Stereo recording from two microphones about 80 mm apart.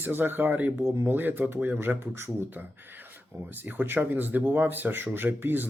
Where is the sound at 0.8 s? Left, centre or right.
Right.